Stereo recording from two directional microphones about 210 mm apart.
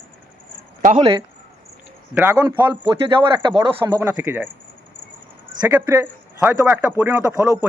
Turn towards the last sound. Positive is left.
turn(degrees=-15)  # may be behind; listen again after turning